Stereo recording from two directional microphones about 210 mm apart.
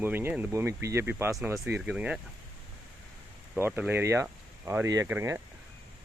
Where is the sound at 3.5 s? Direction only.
10° right (ahead or behind).